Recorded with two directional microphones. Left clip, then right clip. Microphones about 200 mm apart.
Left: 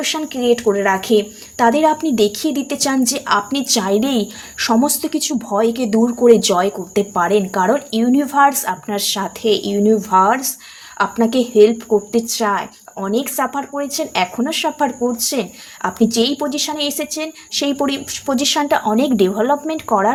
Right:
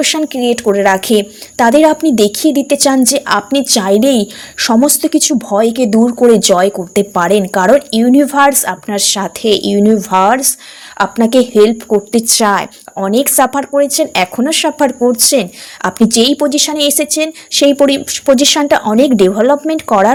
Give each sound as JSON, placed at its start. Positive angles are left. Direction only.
{"t": 0.0, "sound": "speech", "side_deg": -40}